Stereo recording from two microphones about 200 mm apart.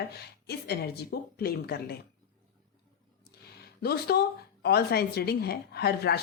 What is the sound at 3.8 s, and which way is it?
A woman's voice, 50° left (ahead or behind).